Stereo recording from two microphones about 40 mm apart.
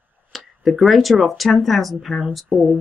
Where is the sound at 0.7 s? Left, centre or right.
Centre.